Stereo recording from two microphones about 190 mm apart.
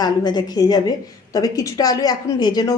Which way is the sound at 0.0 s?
20° left (ahead or behind).